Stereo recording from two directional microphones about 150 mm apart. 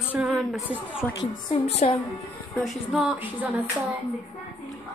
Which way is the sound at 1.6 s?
45° left (ahead or behind).